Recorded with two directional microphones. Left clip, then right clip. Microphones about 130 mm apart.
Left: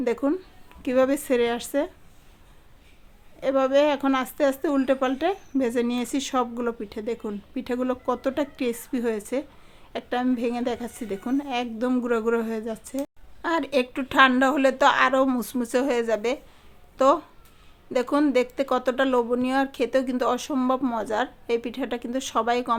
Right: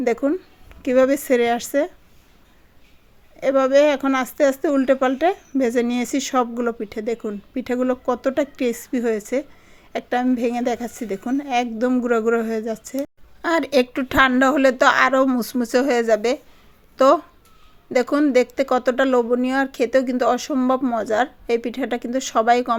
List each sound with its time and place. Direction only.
0.0 s speech: 30° right (ahead or behind)
3.4 s speech: 30° right (ahead or behind)
13.4 s speech: 40° right (ahead or behind)